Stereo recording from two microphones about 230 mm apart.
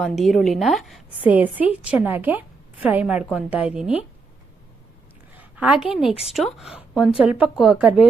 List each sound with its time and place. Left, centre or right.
0.0 s a woman's voice: centre
5.4 s a sound: centre
6.1 s speech: left
6.3 s speech: centre